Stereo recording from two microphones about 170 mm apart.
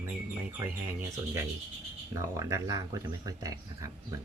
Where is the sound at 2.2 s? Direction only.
15° right (ahead or behind).